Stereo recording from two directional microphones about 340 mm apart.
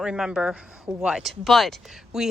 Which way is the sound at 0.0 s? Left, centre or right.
Centre.